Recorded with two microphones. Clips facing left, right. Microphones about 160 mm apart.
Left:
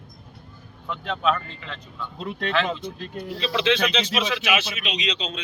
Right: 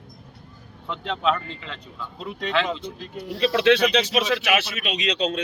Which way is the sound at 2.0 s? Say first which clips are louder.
Left 2 dB; centre (ahead or behind).